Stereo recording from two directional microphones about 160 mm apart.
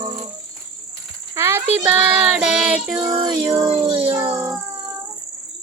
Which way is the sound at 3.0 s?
30° right (ahead or behind).